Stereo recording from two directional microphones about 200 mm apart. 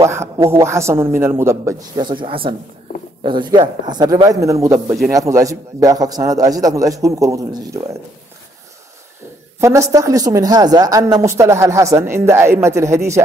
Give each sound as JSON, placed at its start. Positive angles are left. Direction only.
{"t": 0.0, "sound": "a woman's voice", "side_deg": -15}
{"t": 9.6, "sound": "a woman's voice", "side_deg": -15}